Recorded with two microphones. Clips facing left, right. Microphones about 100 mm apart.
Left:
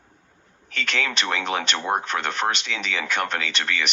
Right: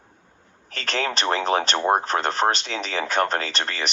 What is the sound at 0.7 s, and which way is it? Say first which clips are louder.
Speech: right 1 dB; 35° right (ahead or behind).